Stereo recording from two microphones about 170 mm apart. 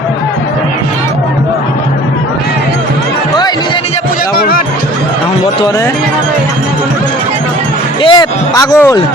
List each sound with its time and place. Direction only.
4.4 s music: 60° left (ahead or behind)
8.0 s a man's voice: 25° left (ahead or behind)